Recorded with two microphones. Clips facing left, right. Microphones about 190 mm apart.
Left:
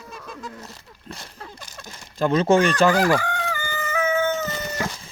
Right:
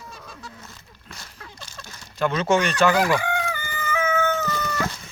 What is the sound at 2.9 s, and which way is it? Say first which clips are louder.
Chicken: left 2 dB; 45° left (ahead or behind).